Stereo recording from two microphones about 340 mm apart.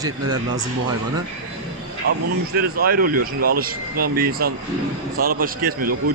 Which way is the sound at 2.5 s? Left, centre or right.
Right.